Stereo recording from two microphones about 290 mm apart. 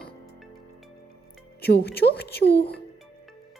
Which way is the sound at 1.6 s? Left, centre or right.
Left.